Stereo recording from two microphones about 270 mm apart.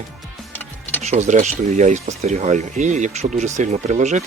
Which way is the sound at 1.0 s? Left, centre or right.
Right.